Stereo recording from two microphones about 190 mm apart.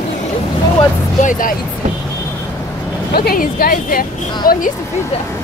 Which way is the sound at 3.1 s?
50° left (ahead or behind).